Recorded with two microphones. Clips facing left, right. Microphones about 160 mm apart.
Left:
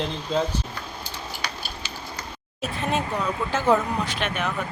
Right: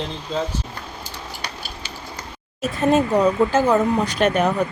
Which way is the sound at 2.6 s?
40° right (ahead or behind).